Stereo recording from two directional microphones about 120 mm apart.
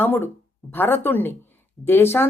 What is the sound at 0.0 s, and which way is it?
Speech, 15° left (ahead or behind).